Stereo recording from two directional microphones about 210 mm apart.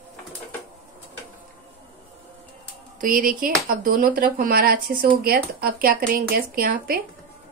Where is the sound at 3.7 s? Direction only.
40° right (ahead or behind).